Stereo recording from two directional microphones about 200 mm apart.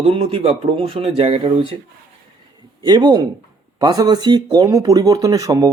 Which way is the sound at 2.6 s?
20° right (ahead or behind).